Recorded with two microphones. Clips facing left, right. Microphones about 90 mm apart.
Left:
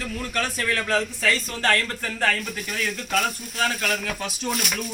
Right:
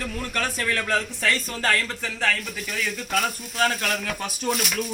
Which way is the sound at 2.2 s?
15° left (ahead or behind).